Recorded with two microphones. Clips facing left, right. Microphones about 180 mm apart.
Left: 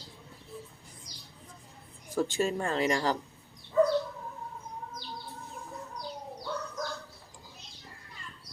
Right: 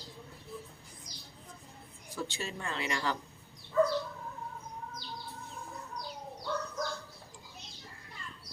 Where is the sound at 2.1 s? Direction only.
45° left (ahead or behind).